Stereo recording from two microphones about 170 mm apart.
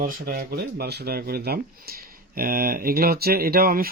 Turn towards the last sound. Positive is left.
turn(degrees=-60)  # may be behind; listen again after turning